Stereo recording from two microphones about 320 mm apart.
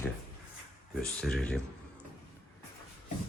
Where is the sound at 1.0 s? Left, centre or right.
Centre.